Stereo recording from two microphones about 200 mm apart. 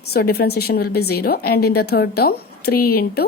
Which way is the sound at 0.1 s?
50° left (ahead or behind).